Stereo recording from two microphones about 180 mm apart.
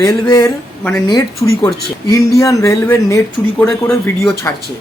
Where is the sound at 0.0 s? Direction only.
15° left (ahead or behind).